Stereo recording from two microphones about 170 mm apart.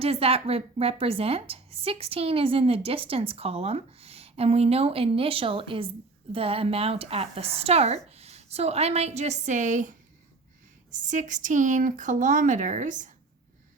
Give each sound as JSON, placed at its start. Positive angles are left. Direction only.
{"t": 0.0, "sound": "a woman's voice", "side_deg": -35}
{"t": 10.9, "sound": "speech", "side_deg": -45}